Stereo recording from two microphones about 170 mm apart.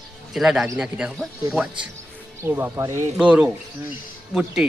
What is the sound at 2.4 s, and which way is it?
A man's voice, 15° right (ahead or behind).